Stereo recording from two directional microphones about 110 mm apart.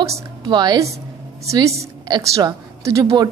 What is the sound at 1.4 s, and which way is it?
A woman's voice, 30° right (ahead or behind).